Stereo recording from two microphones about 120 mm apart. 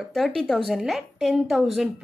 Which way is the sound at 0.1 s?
5° left (ahead or behind).